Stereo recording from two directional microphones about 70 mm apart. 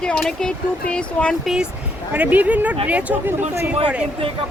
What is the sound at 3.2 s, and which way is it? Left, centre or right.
Speech, right.